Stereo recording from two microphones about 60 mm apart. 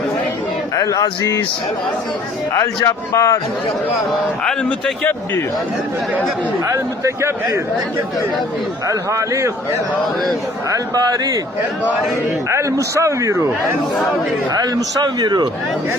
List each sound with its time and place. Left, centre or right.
0.9 s speech: left
2.8 s a man's voice: left
6.7 s a man's voice: right
8.9 s a man's voice: right
10.7 s a man's voice: right
12.5 s a man's voice: right
14.5 s a man's voice: right